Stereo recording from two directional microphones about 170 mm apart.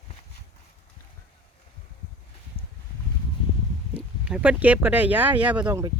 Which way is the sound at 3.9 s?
10° right (ahead or behind).